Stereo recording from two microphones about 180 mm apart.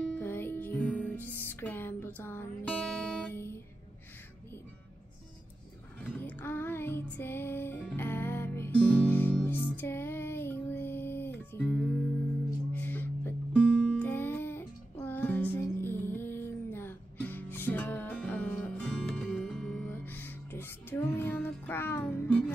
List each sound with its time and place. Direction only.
0.1 s music: 10° left (ahead or behind)
5.9 s music: 10° left (ahead or behind)